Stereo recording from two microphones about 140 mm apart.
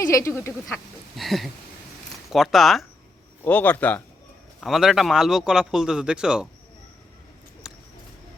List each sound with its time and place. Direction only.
0.0 s speech: 25° left (ahead or behind)
1.1 s a man's voice: centre (ahead or behind)
3.4 s a man's voice: 15° left (ahead or behind)
4.6 s a man's voice: centre (ahead or behind)
7.6 s a sound: 5° right (ahead or behind)